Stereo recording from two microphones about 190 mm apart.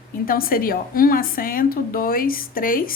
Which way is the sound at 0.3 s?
50° left (ahead or behind).